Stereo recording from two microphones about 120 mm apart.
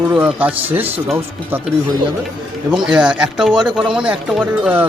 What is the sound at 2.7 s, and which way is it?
Speech, 5° right (ahead or behind).